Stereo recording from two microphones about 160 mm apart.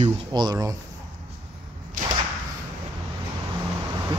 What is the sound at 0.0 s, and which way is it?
Speech, 25° right (ahead or behind).